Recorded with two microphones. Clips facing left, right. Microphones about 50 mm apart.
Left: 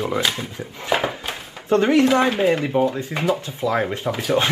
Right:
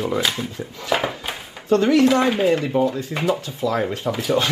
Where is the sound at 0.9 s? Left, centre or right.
Centre.